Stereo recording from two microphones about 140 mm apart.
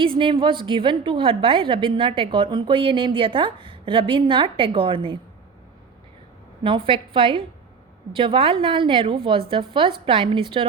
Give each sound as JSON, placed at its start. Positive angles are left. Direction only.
{"t": 0.0, "sound": "a woman's voice", "side_deg": -35}
{"t": 6.6, "sound": "a woman's voice", "side_deg": -35}